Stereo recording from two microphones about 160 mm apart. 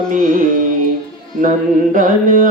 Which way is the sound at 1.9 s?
60° right (ahead or behind).